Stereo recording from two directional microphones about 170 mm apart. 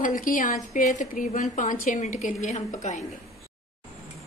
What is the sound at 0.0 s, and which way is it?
A woman's voice, 50° left (ahead or behind).